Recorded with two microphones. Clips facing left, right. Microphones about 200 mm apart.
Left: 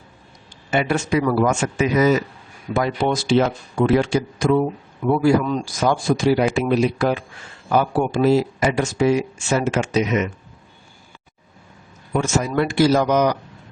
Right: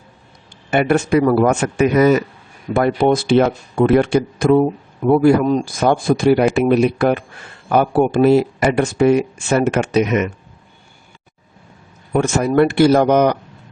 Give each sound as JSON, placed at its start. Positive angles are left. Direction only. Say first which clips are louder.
{"t": 0.7, "sound": "speech", "louder": "right 5 dB", "side_deg": -55}
{"t": 12.1, "sound": "speech", "louder": "right 5 dB", "side_deg": -60}